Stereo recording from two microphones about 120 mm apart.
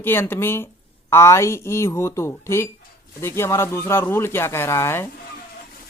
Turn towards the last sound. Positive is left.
turn(degrees=20)  # may be behind; listen again after turning